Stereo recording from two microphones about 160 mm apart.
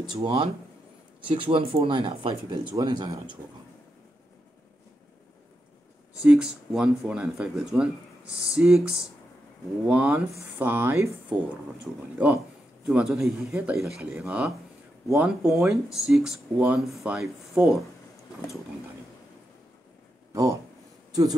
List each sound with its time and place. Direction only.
0.2 s speech: 35° right (ahead or behind)
6.2 s speech: 5° right (ahead or behind)
21.1 s speech: 25° right (ahead or behind)